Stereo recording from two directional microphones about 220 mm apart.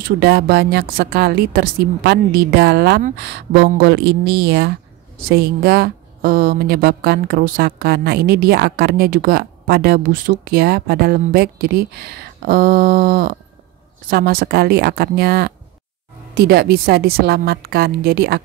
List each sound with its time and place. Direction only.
0.0 s a woman's voice: 45° right (ahead or behind)